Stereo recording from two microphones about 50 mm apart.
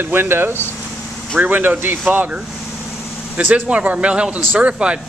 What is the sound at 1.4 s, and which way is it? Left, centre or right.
Speech, right.